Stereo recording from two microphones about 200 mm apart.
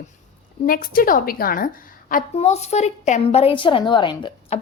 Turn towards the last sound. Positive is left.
turn(degrees=25)  # may be behind; listen again after turning